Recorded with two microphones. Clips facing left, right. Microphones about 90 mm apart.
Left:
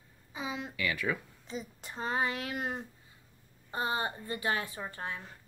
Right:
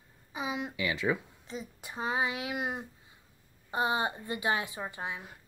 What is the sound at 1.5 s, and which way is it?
Speech, centre (ahead or behind).